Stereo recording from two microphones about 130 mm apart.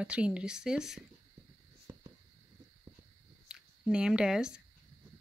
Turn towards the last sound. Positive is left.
turn(degrees=-5)  # may be behind; listen again after turning